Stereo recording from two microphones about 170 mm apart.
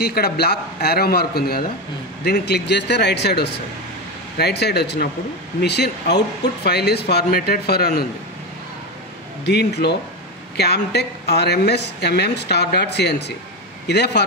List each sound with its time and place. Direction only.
0.0 s speech: 70° left (ahead or behind)
9.4 s speech: 80° left